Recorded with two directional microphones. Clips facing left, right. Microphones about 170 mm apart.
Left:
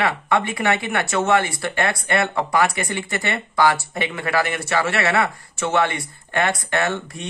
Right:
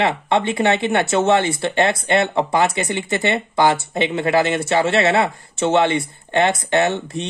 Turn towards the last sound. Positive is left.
turn(degrees=-20)  # may be behind; listen again after turning